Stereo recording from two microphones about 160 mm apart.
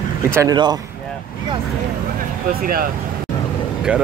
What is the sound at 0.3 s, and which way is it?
Speech, 20° right (ahead or behind).